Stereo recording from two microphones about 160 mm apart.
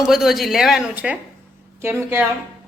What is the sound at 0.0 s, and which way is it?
A woman's voice, centre (ahead or behind).